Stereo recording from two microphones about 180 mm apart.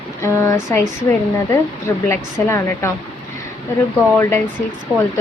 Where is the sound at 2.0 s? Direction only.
15° left (ahead or behind).